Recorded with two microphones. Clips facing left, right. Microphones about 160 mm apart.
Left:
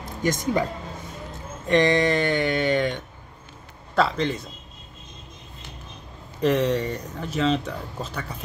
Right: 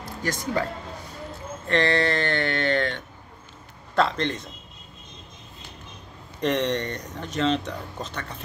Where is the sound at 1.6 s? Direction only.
15° left (ahead or behind).